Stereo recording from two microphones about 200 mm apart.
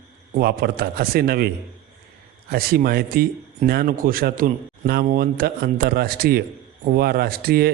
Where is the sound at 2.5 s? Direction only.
50° right (ahead or behind).